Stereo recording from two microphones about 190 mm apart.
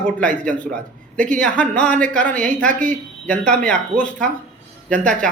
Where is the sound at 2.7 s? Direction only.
45° right (ahead or behind).